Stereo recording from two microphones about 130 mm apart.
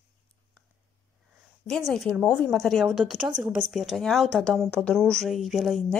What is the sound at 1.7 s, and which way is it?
A woman's voice, centre (ahead or behind).